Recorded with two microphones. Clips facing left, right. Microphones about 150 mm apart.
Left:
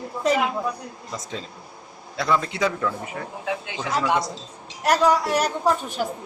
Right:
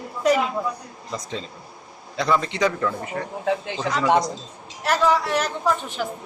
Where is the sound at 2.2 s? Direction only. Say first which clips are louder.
Right 1 dB; centre (ahead or behind).